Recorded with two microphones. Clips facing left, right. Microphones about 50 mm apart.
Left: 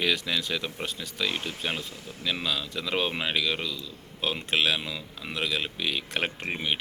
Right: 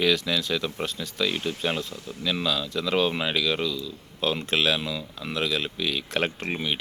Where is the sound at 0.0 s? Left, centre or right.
Centre.